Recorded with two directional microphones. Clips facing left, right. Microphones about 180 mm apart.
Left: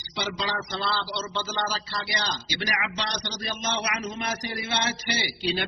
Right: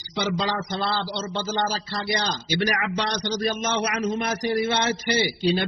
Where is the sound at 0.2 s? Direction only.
45° right (ahead or behind).